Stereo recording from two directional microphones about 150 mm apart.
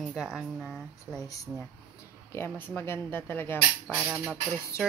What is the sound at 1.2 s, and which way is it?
Speech, 20° left (ahead or behind).